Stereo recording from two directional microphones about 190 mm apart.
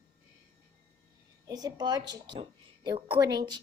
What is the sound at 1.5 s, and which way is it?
A woman's voice, 20° right (ahead or behind).